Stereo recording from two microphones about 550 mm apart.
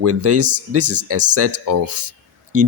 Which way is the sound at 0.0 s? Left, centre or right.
Right.